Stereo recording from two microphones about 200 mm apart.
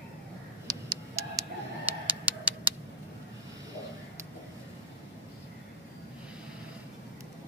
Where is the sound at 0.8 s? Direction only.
15° right (ahead or behind).